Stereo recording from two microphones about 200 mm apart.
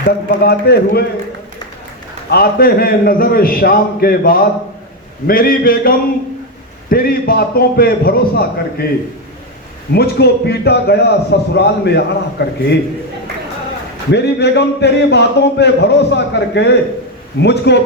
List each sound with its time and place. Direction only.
0.3 s a man's voice: 50° left (ahead or behind)
2.3 s a man's voice: 50° left (ahead or behind)
9.9 s a man's voice: 55° left (ahead or behind)
14.1 s a man's voice: 55° left (ahead or behind)